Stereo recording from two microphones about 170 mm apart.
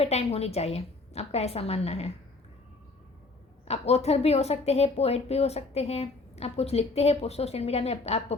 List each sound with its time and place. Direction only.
0.0 s a woman's voice: 35° left (ahead or behind)
3.7 s a woman's voice: 40° left (ahead or behind)